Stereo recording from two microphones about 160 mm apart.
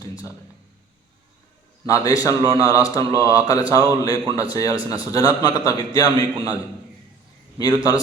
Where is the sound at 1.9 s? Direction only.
20° left (ahead or behind).